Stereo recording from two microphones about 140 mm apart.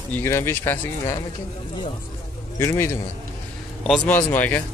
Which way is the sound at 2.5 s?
20° left (ahead or behind).